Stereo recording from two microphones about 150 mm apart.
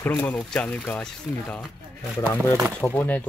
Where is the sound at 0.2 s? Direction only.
10° left (ahead or behind).